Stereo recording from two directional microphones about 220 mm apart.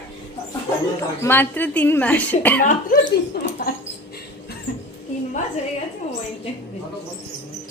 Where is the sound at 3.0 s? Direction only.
45° left (ahead or behind).